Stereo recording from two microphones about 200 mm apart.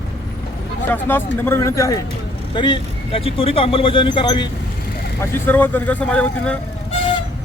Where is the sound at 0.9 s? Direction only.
10° left (ahead or behind).